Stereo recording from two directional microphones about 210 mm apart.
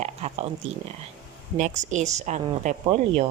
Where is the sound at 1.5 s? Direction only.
35° right (ahead or behind).